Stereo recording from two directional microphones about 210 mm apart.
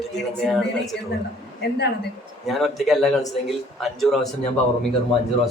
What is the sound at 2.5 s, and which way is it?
Speech, centre (ahead or behind).